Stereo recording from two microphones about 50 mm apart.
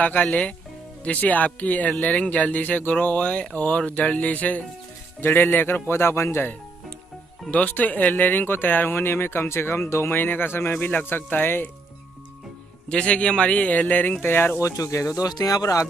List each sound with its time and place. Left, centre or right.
0.0 s speech: left
5.2 s speech: left
5.9 s speech: left
7.5 s speech: left
10.1 s speech: left
12.8 s speech: centre
14.2 s speech: left
14.6 s speech: left